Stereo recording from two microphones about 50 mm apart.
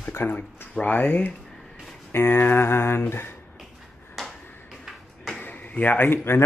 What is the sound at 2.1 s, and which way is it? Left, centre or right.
Speech, left.